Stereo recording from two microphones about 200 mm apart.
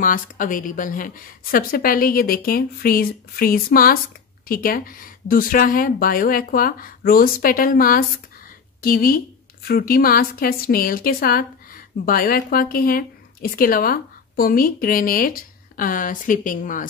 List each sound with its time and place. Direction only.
0.0 s a woman's voice: 40° left (ahead or behind)